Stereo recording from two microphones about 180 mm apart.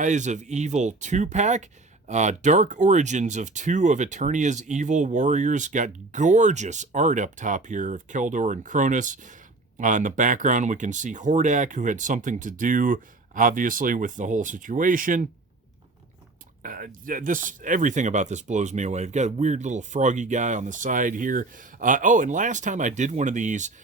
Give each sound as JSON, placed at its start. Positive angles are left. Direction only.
{"t": 0.0, "sound": "speech", "side_deg": -45}
{"t": 16.6, "sound": "speech", "side_deg": -50}